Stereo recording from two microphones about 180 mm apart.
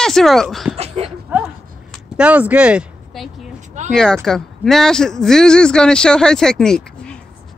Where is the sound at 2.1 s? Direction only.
10° right (ahead or behind).